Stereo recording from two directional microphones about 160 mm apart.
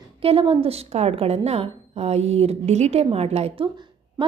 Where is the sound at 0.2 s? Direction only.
35° right (ahead or behind).